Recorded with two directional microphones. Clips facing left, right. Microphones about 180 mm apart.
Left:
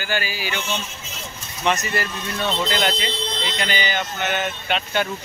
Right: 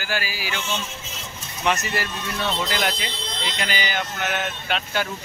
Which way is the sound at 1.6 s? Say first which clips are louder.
Left 2 dB; 5° right (ahead or behind).